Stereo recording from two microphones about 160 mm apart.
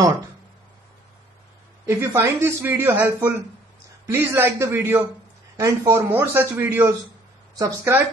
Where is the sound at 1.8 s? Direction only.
20° right (ahead or behind).